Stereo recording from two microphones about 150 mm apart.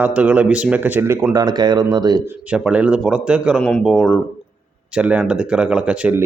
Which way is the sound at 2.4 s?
5° right (ahead or behind).